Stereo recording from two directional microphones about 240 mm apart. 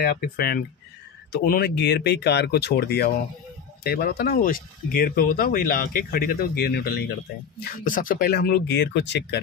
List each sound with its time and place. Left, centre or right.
0.0 s speech: left